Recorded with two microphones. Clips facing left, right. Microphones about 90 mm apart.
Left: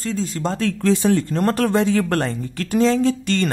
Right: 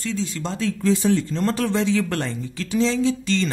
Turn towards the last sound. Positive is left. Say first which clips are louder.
# left 2 dB
turn(degrees=55)  # may be behind; listen again after turning